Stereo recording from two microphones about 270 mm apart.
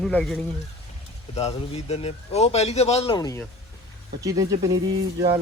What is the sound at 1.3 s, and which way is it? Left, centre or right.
Speech, left.